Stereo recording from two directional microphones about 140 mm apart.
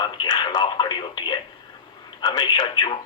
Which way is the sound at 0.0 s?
30° left (ahead or behind).